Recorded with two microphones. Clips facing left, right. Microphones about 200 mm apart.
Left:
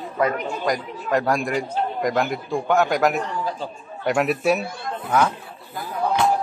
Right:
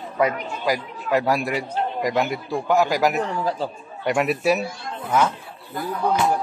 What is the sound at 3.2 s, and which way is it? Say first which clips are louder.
Speech: right 3 dB; 35° right (ahead or behind).